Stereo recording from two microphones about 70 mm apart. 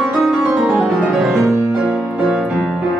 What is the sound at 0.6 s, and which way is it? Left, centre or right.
Music, centre.